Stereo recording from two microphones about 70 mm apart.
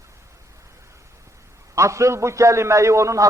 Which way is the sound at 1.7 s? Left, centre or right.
Right.